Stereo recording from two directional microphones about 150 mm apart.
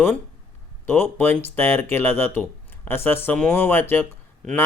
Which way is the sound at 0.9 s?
15° left (ahead or behind).